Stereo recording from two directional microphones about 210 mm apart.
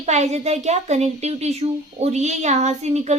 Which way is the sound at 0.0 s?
30° right (ahead or behind).